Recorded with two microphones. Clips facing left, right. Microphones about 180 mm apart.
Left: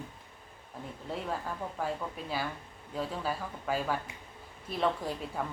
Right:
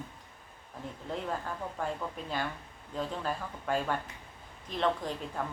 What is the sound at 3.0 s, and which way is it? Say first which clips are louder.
Speech: even; 5° left (ahead or behind).